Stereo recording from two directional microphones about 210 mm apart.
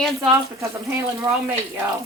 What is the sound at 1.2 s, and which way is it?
Speech, 15° right (ahead or behind).